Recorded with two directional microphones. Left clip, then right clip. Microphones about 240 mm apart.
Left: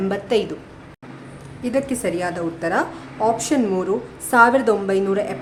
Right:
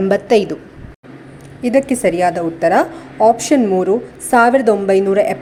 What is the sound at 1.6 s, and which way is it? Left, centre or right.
A woman's voice, right.